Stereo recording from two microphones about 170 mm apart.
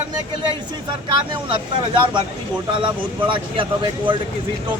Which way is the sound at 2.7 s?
30° right (ahead or behind).